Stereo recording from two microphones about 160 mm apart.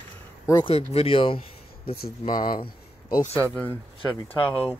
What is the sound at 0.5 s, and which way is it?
Speech, 30° left (ahead or behind).